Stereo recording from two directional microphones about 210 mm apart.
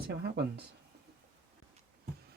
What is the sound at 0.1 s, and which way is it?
Speech, 50° right (ahead or behind).